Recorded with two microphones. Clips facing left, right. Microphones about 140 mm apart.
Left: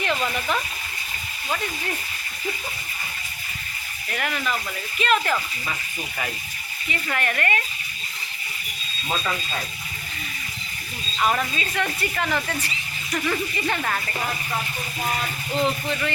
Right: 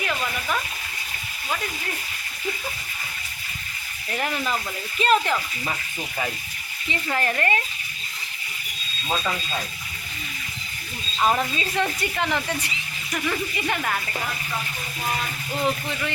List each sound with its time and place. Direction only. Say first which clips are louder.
0.0 s speech: left 3 dB; 5° right (ahead or behind)
4.1 s speech: right 1 dB; 30° right (ahead or behind)
5.2 s speech: even; 15° right (ahead or behind)
6.8 s speech: right 1 dB; 30° right (ahead or behind)
11.2 s speech: right 1 dB; 20° right (ahead or behind)
13.1 s speech: left 1 dB; centre (ahead or behind)
15.6 s speech: even; 10° right (ahead or behind)